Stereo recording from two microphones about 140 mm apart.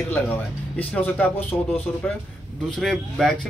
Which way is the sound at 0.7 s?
10° left (ahead or behind).